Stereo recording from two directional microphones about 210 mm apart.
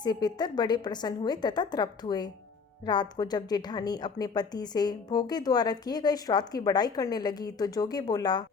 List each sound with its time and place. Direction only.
0.0 s a woman's voice: 20° left (ahead or behind)